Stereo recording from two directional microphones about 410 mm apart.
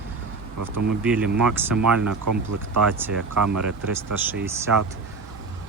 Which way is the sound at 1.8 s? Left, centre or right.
Right.